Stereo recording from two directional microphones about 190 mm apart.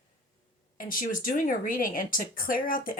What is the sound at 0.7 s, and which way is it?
Speech, 45° left (ahead or behind).